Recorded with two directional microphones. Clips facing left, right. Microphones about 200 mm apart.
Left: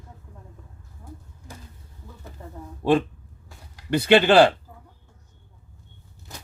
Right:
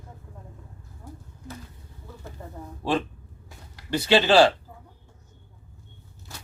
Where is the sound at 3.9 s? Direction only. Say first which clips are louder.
Left 3 dB; 60° left (ahead or behind).